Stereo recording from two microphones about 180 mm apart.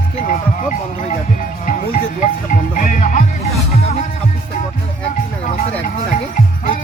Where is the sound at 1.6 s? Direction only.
50° left (ahead or behind).